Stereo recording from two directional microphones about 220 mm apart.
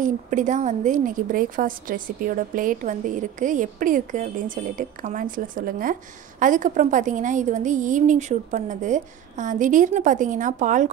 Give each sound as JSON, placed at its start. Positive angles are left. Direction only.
{"t": 0.0, "sound": "a woman's voice", "side_deg": -35}